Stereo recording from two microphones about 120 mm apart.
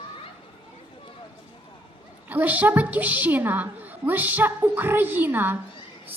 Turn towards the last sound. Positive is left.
turn(degrees=-15)  # may be behind; listen again after turning